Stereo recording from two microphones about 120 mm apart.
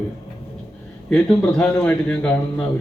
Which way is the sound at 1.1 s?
10° left (ahead or behind).